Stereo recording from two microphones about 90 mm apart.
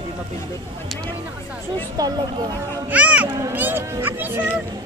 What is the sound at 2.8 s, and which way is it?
Speech, 15° right (ahead or behind).